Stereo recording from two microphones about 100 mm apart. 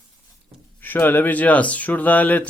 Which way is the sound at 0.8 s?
20° left (ahead or behind).